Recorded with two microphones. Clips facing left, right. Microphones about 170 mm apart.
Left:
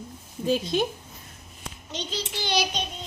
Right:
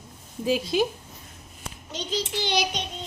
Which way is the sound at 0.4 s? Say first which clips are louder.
Right 1 dB; 5° right (ahead or behind).